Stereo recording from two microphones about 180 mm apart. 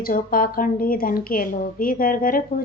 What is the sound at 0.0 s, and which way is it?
A woman's voice, 55° left (ahead or behind).